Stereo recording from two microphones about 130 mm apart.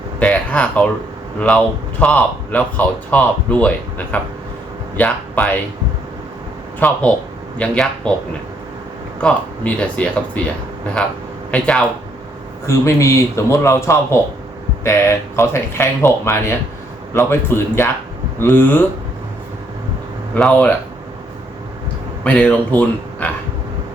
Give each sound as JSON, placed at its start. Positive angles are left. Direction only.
{"t": 0.2, "sound": "a man's voice", "side_deg": 10}
{"t": 6.7, "sound": "speech", "side_deg": 10}
{"t": 9.2, "sound": "speech", "side_deg": 10}
{"t": 11.5, "sound": "speech", "side_deg": 10}
{"t": 12.6, "sound": "speech", "side_deg": 25}
{"t": 20.3, "sound": "speech", "side_deg": 10}
{"t": 22.2, "sound": "speech", "side_deg": 10}